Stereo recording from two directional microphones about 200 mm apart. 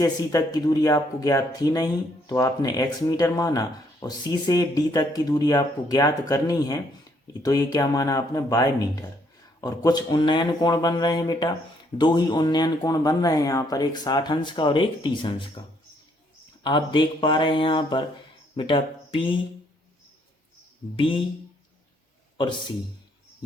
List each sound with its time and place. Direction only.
0.0 s speech: 20° left (ahead or behind)
16.6 s speech: 25° left (ahead or behind)
20.9 s speech: 25° left (ahead or behind)